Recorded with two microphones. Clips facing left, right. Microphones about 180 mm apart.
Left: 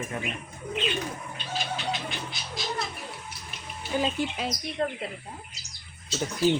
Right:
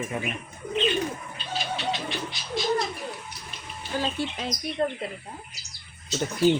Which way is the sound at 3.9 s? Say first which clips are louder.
Left 1 dB; 10° left (ahead or behind).